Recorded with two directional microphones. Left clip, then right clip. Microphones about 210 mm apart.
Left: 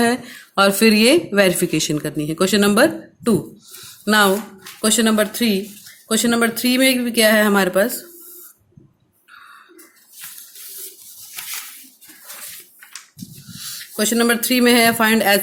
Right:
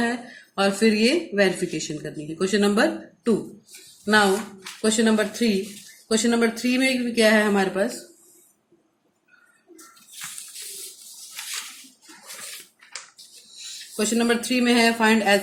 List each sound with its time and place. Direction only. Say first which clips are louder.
0.0 s speech: left 8 dB; 45° left (ahead or behind)
13.7 s speech: left 5 dB; 50° left (ahead or behind)